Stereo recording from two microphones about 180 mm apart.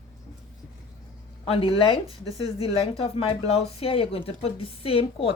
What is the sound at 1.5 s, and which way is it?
Speech, 30° left (ahead or behind).